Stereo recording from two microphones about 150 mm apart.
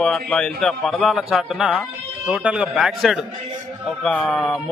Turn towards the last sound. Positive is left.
turn(degrees=0)  # may be behind; listen again after turning